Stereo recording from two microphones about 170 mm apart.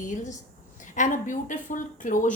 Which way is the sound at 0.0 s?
45° left (ahead or behind).